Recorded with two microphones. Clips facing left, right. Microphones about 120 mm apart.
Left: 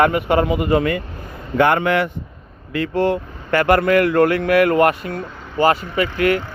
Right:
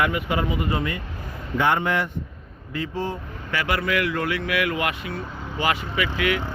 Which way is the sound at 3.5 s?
50° left (ahead or behind).